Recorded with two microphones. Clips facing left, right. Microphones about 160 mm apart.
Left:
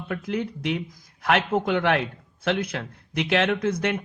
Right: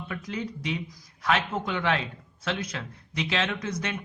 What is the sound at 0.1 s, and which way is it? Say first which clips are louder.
A man's voice: left 7 dB; 60° left (ahead or behind).